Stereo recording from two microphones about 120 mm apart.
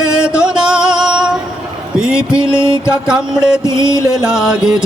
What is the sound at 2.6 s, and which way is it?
Music, 20° left (ahead or behind).